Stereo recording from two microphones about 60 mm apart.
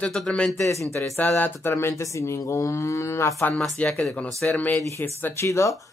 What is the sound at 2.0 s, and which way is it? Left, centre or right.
Speech, left.